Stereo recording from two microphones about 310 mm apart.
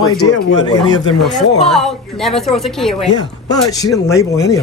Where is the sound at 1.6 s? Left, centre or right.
Centre.